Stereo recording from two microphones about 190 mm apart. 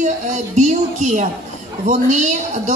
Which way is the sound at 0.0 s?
40° right (ahead or behind).